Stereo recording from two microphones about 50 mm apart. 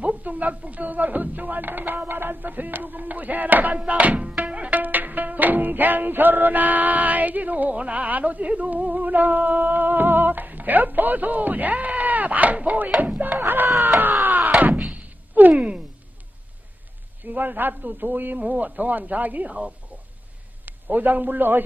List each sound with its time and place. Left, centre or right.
0.0 s speech: right
3.8 s music: right
13.7 s a sound: right
14.6 s thump: right
17.2 s speech: right
20.6 s a man's voice: right